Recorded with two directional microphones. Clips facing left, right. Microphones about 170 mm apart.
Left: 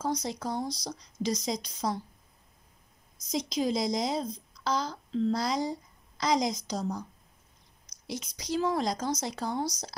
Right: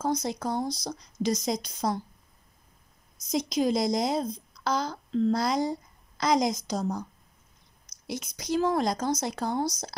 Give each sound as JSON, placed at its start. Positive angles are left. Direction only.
{"t": 0.0, "sound": "speech", "side_deg": -55}
{"t": 3.3, "sound": "speech", "side_deg": -55}
{"t": 8.1, "sound": "speech", "side_deg": -55}